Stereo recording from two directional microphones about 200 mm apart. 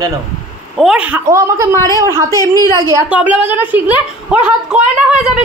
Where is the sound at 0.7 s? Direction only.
5° right (ahead or behind).